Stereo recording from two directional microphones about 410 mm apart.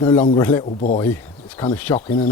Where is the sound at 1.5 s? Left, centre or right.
Centre.